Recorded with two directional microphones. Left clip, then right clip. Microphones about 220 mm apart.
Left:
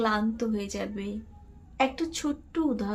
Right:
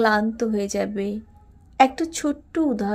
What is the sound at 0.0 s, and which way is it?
A woman's voice, 30° right (ahead or behind).